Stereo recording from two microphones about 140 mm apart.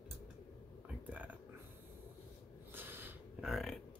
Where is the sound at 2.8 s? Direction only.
15° right (ahead or behind).